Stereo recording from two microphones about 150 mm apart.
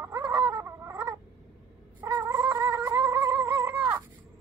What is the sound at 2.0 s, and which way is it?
Cat, 20° right (ahead or behind).